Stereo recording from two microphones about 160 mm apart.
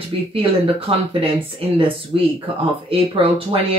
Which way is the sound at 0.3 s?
35° right (ahead or behind).